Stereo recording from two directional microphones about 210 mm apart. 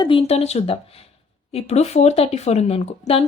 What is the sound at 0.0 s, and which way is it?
A woman's voice, 25° left (ahead or behind).